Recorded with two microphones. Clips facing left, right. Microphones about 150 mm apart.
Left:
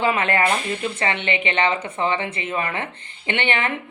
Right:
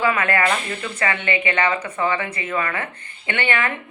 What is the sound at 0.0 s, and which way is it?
Speech, 20° left (ahead or behind).